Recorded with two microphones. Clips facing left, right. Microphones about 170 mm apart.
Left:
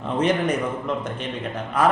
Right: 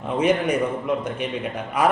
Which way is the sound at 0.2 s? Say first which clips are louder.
Right 2 dB; 10° right (ahead or behind).